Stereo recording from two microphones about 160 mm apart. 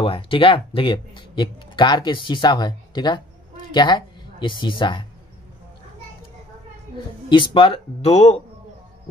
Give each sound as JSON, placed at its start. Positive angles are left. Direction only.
{"t": 0.0, "sound": "speech", "side_deg": 35}
{"t": 7.2, "sound": "speech", "side_deg": 30}